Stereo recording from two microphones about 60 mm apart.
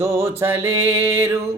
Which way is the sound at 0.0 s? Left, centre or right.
Right.